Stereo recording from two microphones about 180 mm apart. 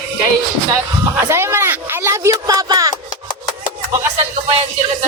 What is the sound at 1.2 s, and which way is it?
Speech, 15° right (ahead or behind).